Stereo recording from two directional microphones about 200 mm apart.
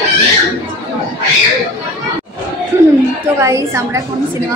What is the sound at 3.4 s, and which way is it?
Speech, 15° right (ahead or behind).